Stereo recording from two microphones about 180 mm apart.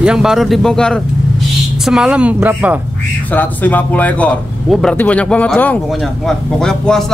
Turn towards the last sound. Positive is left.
turn(degrees=5)  # may be behind; listen again after turning